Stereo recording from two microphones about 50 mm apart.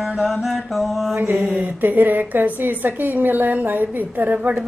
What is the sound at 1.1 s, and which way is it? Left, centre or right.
A woman's voice, right.